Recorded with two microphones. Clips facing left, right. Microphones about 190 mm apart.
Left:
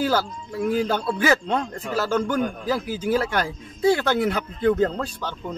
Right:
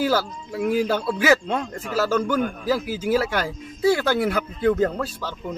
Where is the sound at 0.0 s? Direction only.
10° right (ahead or behind).